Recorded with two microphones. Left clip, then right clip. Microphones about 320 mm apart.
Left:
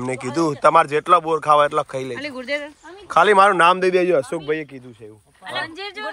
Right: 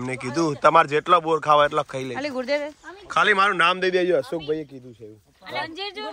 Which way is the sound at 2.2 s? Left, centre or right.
Centre.